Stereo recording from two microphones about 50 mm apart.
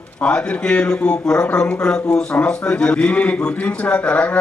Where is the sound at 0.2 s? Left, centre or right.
Left.